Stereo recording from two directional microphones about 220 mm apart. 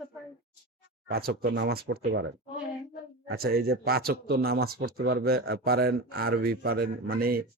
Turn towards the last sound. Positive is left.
turn(degrees=-40)  # may be behind; listen again after turning